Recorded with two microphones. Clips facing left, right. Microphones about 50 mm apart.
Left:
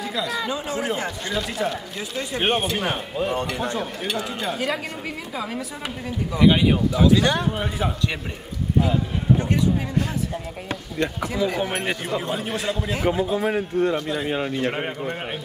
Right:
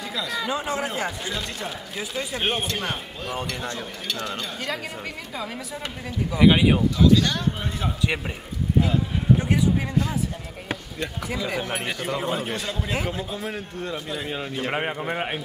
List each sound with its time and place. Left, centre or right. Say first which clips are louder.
0.0 s speech: left 3 dB; centre
0.5 s a man's voice: right 1 dB; centre
0.7 s a man's voice: left 2 dB; centre
6.9 s a man's voice: left 1 dB; centre
8.8 s a man's voice: left 1 dB; centre
11.3 s a man's voice: left 4 dB; centre
13.9 s a man's voice: left 6 dB; centre
14.2 s speech: left 5 dB; centre
14.7 s a man's voice: right 1 dB; centre